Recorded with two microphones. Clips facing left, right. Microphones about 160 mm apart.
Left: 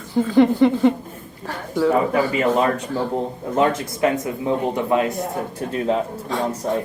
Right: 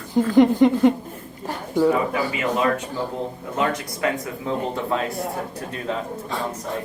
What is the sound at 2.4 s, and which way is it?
A man's voice, 35° left (ahead or behind).